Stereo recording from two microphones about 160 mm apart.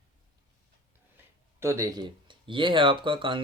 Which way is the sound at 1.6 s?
20° right (ahead or behind).